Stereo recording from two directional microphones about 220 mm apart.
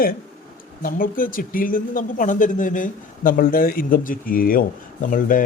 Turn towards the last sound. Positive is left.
turn(degrees=40)  # may be behind; listen again after turning